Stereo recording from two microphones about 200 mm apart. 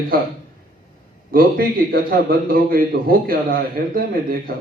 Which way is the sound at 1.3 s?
45° right (ahead or behind).